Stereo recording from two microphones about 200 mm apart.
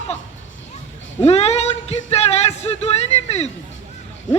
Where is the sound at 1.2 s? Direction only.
30° left (ahead or behind).